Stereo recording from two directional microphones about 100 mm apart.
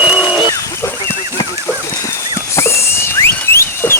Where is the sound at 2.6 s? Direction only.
25° left (ahead or behind).